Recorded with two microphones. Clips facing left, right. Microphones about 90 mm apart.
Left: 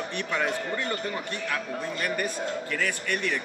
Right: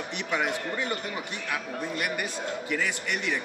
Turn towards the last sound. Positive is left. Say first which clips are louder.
# left 1 dB
turn(degrees=-15)  # may be behind; listen again after turning